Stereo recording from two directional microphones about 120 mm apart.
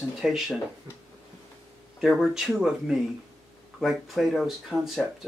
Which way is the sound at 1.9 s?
5° right (ahead or behind).